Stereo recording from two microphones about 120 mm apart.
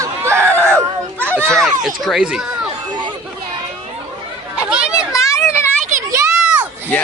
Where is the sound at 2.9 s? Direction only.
40° right (ahead or behind).